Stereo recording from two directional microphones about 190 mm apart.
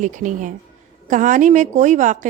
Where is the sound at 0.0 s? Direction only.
40° right (ahead or behind).